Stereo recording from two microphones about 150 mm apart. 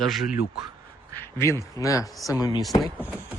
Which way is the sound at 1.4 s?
20° left (ahead or behind).